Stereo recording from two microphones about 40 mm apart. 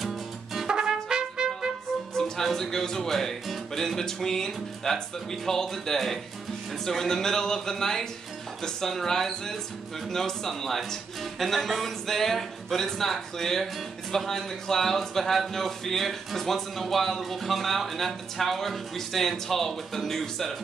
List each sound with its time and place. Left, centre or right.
0.7 s trumpet: centre
2.1 s a man's voice: centre